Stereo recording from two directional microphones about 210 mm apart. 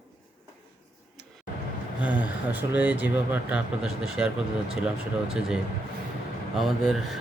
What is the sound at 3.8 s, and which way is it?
Speech, 75° left (ahead or behind).